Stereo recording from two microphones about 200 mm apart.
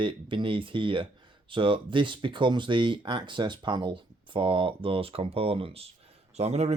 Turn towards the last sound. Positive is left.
turn(degrees=-35)  # may be behind; listen again after turning